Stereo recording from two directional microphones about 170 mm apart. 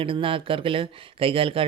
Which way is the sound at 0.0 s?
30° right (ahead or behind).